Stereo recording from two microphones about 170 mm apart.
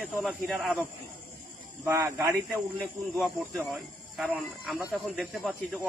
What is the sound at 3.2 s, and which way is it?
Speech, centre (ahead or behind).